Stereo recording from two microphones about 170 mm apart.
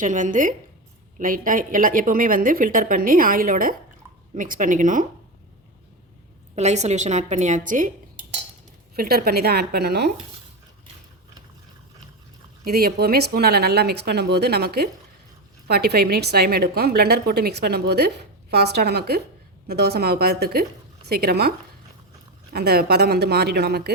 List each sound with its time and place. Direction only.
0.0 s a woman's voice: 50° right (ahead or behind)
6.6 s a woman's voice: 40° right (ahead or behind)
9.0 s a woman's voice: 60° right (ahead or behind)
12.6 s a woman's voice: 60° right (ahead or behind)
22.5 s a woman's voice: 65° right (ahead or behind)